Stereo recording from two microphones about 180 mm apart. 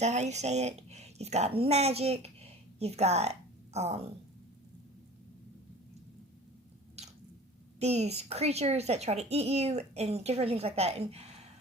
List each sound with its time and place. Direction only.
0.0 s a child's voice: 40° right (ahead or behind)
7.8 s a child's voice: 35° right (ahead or behind)